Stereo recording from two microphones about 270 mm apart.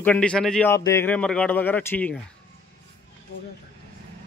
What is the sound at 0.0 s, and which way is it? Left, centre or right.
A man's voice, centre.